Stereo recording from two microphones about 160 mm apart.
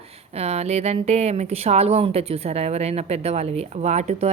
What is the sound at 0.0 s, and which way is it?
Speech, 40° right (ahead or behind).